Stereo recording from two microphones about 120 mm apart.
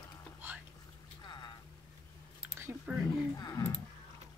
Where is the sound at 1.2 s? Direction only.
35° left (ahead or behind).